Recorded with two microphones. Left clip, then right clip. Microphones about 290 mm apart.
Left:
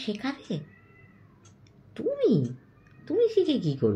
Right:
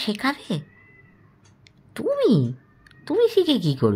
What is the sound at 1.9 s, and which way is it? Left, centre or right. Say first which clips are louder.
Speech: right 5 dB; right.